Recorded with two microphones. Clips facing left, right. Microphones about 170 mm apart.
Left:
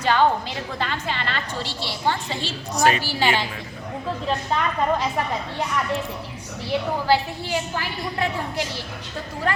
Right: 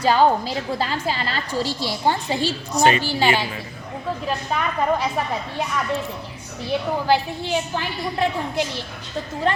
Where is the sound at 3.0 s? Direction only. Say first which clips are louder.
Right 2 dB; 15° right (ahead or behind).